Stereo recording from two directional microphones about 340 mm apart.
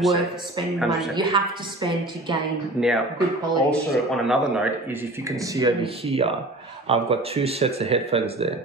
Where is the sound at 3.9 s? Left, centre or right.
Centre.